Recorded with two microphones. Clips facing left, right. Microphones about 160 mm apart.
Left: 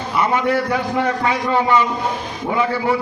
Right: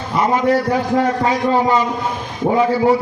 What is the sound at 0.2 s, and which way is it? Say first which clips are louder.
A man's voice: right 3 dB; 40° right (ahead or behind).